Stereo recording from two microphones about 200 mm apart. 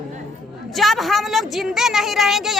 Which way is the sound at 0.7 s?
Centre (ahead or behind).